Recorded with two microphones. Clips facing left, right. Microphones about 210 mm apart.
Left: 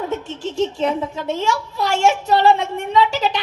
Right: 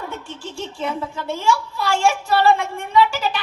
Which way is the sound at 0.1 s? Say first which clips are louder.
Left 7 dB; 20° left (ahead or behind).